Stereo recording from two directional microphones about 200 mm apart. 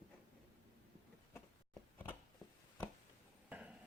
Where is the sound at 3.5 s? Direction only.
5° right (ahead or behind).